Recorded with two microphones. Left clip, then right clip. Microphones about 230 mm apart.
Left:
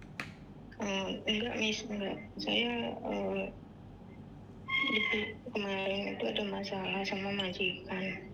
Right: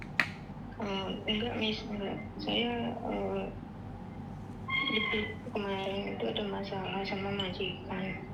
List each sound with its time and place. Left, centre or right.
0.8 s a woman's voice: left
4.7 s a woman's voice: left